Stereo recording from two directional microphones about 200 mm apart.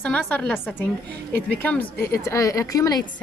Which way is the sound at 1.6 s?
10° left (ahead or behind).